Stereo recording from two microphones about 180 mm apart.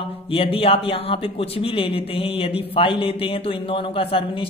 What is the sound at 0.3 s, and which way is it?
Speech, 30° left (ahead or behind).